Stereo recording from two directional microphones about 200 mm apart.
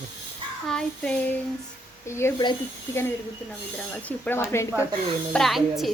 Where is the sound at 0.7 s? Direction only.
5° left (ahead or behind).